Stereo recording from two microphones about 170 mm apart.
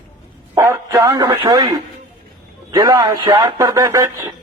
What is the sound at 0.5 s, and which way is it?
A man's voice, 15° right (ahead or behind).